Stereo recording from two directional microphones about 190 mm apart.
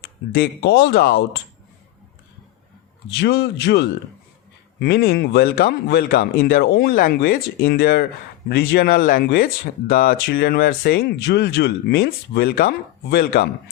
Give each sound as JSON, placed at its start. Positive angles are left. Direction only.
{"t": 0.0, "sound": "speech", "side_deg": 60}
{"t": 3.1, "sound": "speech", "side_deg": 60}